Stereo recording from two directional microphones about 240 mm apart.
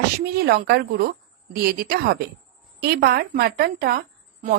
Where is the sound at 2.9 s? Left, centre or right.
Right.